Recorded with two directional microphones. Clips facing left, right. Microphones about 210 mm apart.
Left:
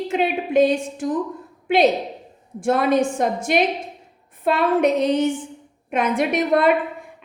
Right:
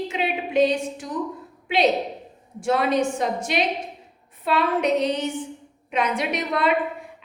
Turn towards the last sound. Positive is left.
turn(degrees=50)  # may be behind; listen again after turning